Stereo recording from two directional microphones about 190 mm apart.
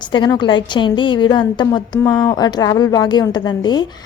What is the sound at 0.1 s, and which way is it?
A woman's voice, 25° left (ahead or behind).